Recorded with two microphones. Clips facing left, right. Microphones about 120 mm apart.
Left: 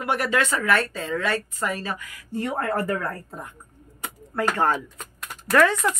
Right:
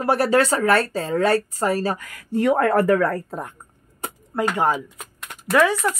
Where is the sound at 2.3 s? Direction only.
90° right.